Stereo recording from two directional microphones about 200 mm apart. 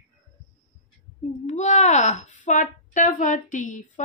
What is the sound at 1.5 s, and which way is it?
A woman's voice, 35° left (ahead or behind).